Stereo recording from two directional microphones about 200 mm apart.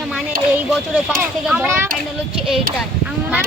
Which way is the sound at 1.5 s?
10° right (ahead or behind).